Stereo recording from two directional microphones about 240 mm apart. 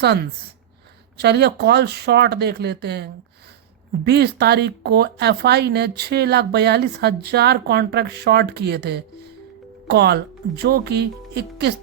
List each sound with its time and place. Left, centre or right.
0.0 s speech: right